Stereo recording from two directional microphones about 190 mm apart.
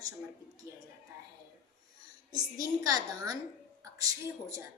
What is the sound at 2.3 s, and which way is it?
A child's voice, 20° right (ahead or behind).